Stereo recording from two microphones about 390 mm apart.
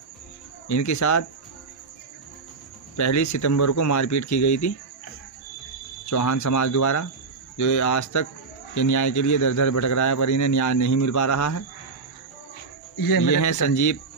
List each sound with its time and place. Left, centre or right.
0.7 s a man's voice: left
3.0 s a man's voice: left
6.0 s a man's voice: left
12.9 s a man's voice: left